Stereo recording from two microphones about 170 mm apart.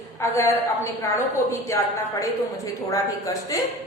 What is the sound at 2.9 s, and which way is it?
Speech, 20° left (ahead or behind).